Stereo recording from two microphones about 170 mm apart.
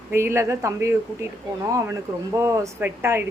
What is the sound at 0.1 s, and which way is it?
Speech, 15° right (ahead or behind).